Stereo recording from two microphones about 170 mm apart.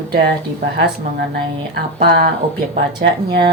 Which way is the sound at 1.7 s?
65° right (ahead or behind).